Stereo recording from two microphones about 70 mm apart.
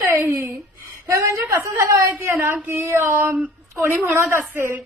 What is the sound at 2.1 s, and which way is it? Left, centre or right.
A woman's voice, right.